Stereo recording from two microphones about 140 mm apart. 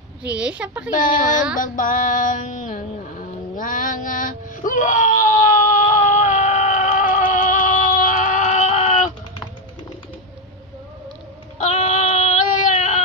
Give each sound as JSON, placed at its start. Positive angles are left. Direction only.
{"t": 0.3, "sound": "speech", "side_deg": -10}
{"t": 1.5, "sound": "female singing", "side_deg": 70}
{"t": 11.5, "sound": "child singing", "side_deg": 60}